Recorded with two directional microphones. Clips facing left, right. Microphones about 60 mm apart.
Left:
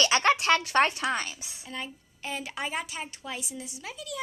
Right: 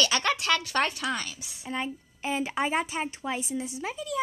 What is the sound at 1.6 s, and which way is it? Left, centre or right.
A woman's voice, centre.